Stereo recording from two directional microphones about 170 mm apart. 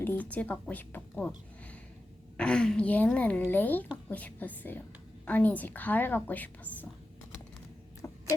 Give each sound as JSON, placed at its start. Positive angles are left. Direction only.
{"t": 0.0, "sound": "speech", "side_deg": 10}
{"t": 2.4, "sound": "speech", "side_deg": 5}
{"t": 8.0, "sound": "a sound", "side_deg": 20}